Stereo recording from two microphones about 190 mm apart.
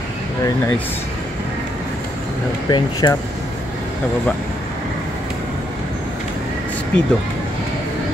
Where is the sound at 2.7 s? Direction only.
20° left (ahead or behind).